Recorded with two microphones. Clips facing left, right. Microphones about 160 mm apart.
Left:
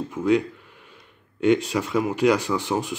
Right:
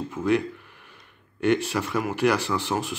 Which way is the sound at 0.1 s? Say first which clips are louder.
Left 3 dB; 15° left (ahead or behind).